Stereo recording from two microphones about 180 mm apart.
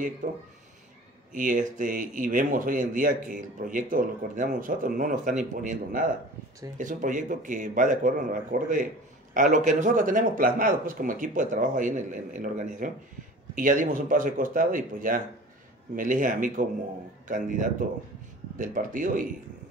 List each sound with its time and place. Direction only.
1.3 s speech: 45° right (ahead or behind)